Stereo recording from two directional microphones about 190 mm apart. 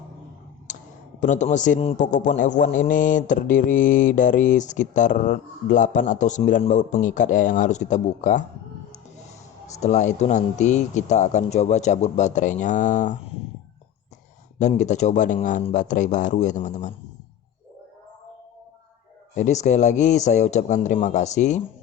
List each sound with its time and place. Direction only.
1.2 s a man's voice: 40° left (ahead or behind)
9.7 s a man's voice: 35° left (ahead or behind)
14.6 s a man's voice: 40° left (ahead or behind)
19.3 s a man's voice: 40° left (ahead or behind)